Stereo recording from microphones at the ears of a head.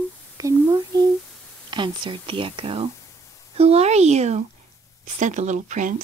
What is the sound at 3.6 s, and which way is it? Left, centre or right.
Speech, right.